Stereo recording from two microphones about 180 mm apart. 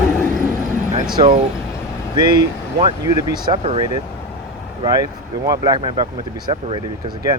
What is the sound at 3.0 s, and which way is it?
Speech, 20° right (ahead or behind).